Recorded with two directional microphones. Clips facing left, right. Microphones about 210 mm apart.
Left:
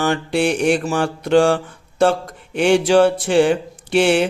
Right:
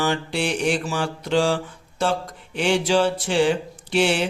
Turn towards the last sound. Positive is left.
turn(degrees=55)  # may be behind; listen again after turning